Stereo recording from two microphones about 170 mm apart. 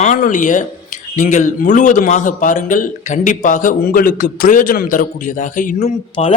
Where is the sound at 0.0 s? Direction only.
45° left (ahead or behind).